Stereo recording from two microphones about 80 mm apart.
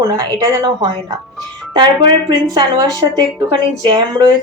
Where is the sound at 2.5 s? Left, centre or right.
Right.